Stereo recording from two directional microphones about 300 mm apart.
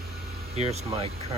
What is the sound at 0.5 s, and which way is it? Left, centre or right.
Speech, right.